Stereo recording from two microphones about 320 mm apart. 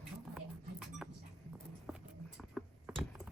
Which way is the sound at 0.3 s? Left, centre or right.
Centre.